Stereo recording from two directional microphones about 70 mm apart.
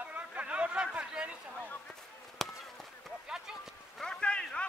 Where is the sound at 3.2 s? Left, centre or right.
Centre.